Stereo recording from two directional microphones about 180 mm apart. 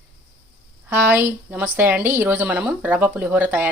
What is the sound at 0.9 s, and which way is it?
A woman's voice, 10° right (ahead or behind).